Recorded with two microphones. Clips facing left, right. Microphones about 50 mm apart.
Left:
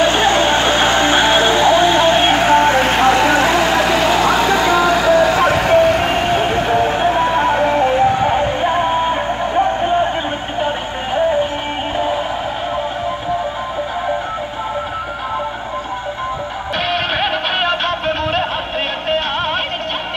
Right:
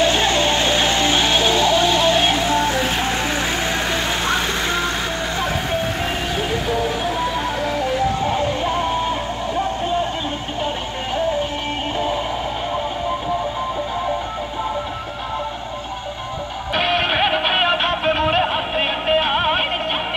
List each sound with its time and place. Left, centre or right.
0.0 s music: left
2.4 s music: left
3.1 s vehicle: left
5.2 s vehicle: left
16.9 s music: centre